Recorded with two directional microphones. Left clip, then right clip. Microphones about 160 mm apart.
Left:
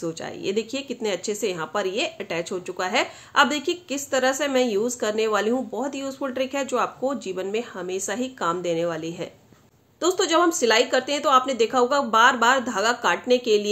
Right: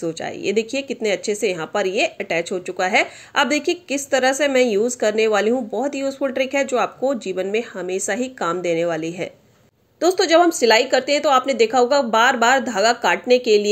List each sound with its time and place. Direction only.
0.0 s speech: 25° right (ahead or behind)